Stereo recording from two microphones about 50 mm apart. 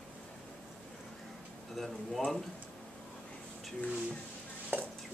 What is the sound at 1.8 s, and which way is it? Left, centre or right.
Speech, centre.